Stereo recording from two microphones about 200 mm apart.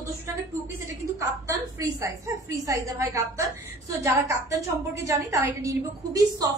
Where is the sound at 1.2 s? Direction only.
15° right (ahead or behind).